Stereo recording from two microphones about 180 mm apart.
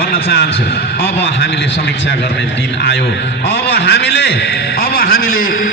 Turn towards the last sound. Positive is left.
turn(degrees=50)  # may be behind; listen again after turning